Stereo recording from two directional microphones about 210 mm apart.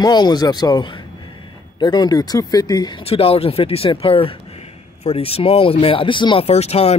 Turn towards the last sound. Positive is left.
turn(degrees=30)  # may be behind; listen again after turning